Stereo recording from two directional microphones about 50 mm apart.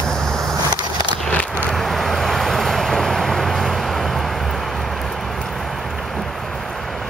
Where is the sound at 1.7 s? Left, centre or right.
Centre.